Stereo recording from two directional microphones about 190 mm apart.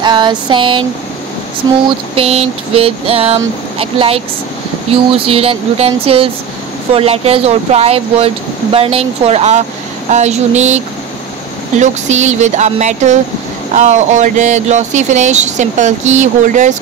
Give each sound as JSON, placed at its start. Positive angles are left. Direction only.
{"t": 0.0, "sound": "a sound", "side_deg": -25}
{"t": 1.9, "sound": "speech", "side_deg": -30}
{"t": 11.8, "sound": "speech", "side_deg": -35}